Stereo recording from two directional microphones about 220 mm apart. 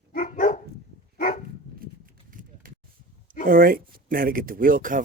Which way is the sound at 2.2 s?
40° right (ahead or behind).